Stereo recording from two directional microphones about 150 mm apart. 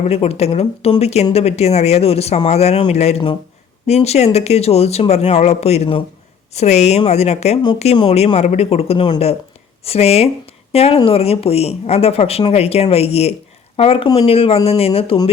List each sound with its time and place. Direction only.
0.0 s speech: 45° left (ahead or behind)